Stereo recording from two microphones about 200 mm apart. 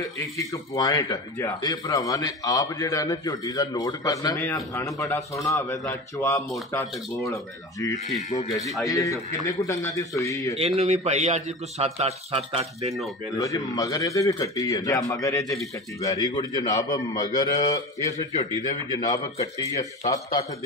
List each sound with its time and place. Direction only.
0.0 s a man's voice: 15° left (ahead or behind)
8.2 s speech: 35° left (ahead or behind)
8.8 s a man's voice: 15° left (ahead or behind)
10.5 s a man's voice: 30° right (ahead or behind)
13.4 s a man's voice: 15° left (ahead or behind)